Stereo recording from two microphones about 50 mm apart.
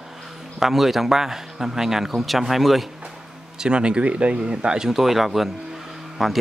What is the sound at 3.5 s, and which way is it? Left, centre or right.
Speech, centre.